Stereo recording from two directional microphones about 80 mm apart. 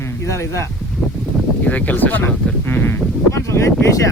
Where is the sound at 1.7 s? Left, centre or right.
Left.